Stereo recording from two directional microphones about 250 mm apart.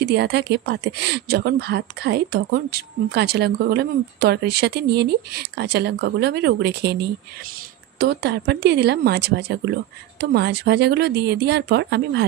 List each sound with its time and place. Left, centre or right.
0.0 s a woman's voice: right